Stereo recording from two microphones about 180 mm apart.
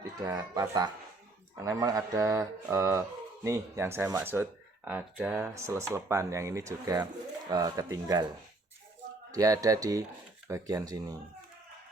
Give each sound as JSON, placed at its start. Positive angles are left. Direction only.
{"t": 0.2, "sound": "speech", "side_deg": -20}
{"t": 9.3, "sound": "speech", "side_deg": -20}